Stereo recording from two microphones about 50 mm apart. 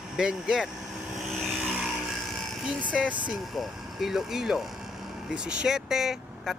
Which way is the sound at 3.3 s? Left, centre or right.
Centre.